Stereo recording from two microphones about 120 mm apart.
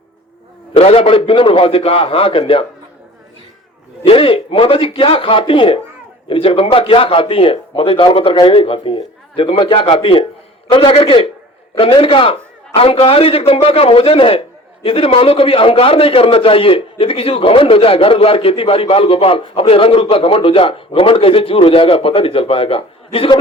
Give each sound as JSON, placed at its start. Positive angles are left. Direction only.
{"t": 0.8, "sound": "a man's voice", "side_deg": 55}
{"t": 4.0, "sound": "a man's voice", "side_deg": 50}